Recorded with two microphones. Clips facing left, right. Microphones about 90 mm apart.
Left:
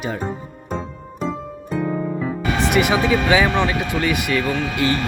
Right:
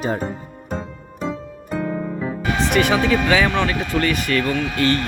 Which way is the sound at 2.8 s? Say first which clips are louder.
Right 1 dB; 15° left (ahead or behind).